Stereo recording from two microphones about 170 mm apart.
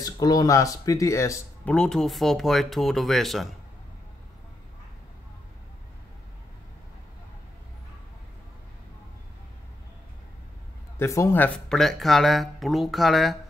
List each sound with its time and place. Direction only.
0.0 s speech: 20° left (ahead or behind)
1.7 s speech: 5° left (ahead or behind)
11.0 s speech: 15° left (ahead or behind); by 13.4 s centre (ahead or behind)